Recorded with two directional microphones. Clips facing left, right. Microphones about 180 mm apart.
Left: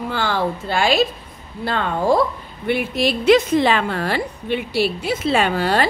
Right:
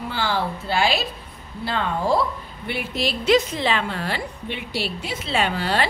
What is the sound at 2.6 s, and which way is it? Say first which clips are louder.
A woman's voice: left 7 dB; 55° left (ahead or behind).